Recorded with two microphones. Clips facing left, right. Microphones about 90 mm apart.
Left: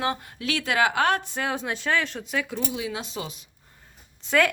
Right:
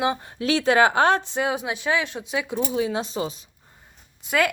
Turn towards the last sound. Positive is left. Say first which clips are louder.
# even
turn(degrees=-5)  # may be behind; listen again after turning